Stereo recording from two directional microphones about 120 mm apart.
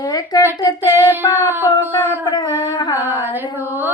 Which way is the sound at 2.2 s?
35° left (ahead or behind).